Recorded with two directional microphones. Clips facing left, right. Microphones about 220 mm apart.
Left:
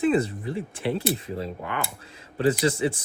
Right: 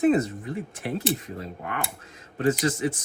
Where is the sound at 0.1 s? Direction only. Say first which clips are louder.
Even; 30° left (ahead or behind).